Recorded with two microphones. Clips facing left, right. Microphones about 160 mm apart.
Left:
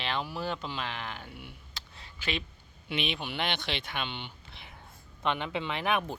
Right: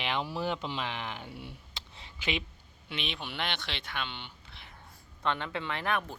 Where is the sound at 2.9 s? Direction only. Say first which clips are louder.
Left 5 dB; 10° left (ahead or behind).